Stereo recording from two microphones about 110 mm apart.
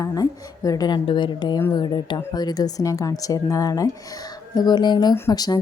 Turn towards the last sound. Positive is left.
turn(degrees=35)  # may be behind; listen again after turning